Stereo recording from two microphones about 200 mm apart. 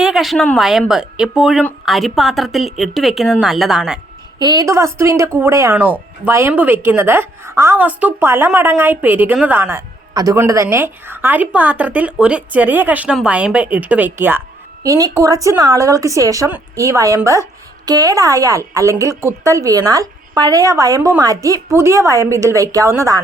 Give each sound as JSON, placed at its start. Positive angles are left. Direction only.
{"t": 0.0, "sound": "speech", "side_deg": 0}
{"t": 4.4, "sound": "speech", "side_deg": -20}